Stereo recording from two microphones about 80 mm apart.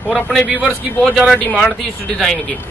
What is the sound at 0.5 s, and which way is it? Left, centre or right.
Speech, centre.